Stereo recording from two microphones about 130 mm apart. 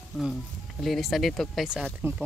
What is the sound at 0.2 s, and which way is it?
Speech, centre (ahead or behind).